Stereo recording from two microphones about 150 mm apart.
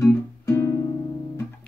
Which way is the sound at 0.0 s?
15° left (ahead or behind).